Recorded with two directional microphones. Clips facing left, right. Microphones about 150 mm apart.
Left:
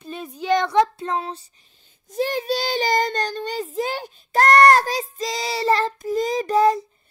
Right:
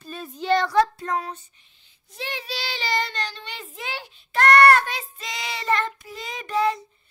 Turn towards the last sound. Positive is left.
turn(degrees=40)  # may be behind; listen again after turning